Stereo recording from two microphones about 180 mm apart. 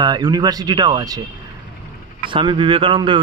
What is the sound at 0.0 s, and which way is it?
A man's voice, 20° right (ahead or behind).